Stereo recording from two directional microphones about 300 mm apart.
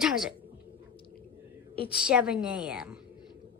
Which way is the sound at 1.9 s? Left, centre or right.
Centre.